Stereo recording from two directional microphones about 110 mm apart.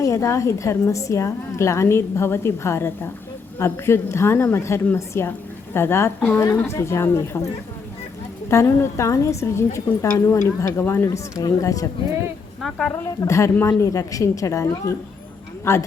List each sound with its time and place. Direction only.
0.0 s a woman's voice: 30° left (ahead or behind); by 6.4 s 15° left (ahead or behind)
6.7 s a woman's voice: 25° left (ahead or behind)
12.9 s a woman's voice: 25° left (ahead or behind)